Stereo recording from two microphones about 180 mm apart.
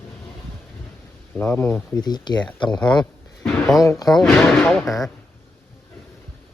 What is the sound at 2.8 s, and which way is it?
Speech, 5° left (ahead or behind).